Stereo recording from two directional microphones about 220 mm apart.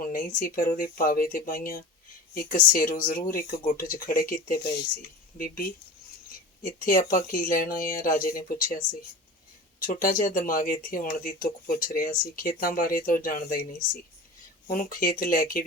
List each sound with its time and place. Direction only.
0.0 s a sound: 40° left (ahead or behind)
0.3 s speech: 40° left (ahead or behind)
6.6 s speech: 40° left (ahead or behind)